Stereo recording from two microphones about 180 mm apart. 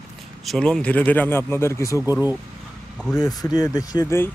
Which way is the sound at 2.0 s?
10° right (ahead or behind).